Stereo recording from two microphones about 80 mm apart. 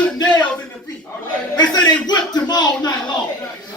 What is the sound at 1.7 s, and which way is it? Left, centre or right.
Speech, left.